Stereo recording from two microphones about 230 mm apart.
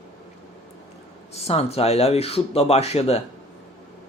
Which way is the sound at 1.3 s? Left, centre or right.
Left.